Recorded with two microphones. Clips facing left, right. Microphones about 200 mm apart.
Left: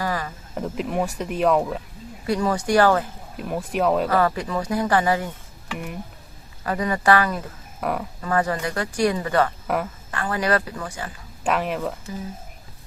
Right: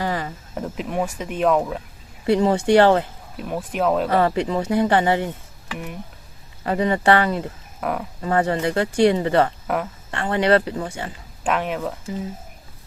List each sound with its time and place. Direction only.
0.0 s a sound: 20° right (ahead or behind)
0.5 s speech: centre (ahead or behind)
2.2 s speech: 25° right (ahead or behind)
3.3 s speech: centre (ahead or behind)
4.1 s speech: 25° right (ahead or behind)
5.7 s speech: centre (ahead or behind)
6.7 s speech: 25° right (ahead or behind)
7.8 s speech: centre (ahead or behind)
8.2 s speech: 25° right (ahead or behind)
11.4 s speech: centre (ahead or behind)